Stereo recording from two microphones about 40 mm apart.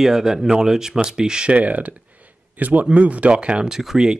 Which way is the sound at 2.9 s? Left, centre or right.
Right.